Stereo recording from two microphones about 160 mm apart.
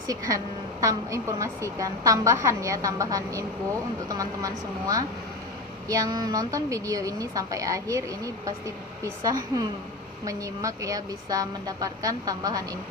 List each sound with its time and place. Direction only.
0.1 s a woman's voice: 20° right (ahead or behind)